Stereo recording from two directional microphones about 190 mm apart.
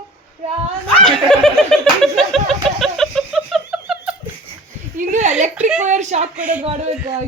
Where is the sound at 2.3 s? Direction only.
Centre (ahead or behind).